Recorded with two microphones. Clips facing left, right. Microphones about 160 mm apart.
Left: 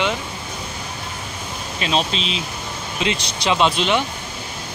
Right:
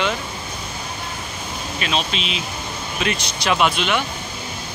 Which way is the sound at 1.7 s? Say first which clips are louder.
Left 3 dB; 30° left (ahead or behind).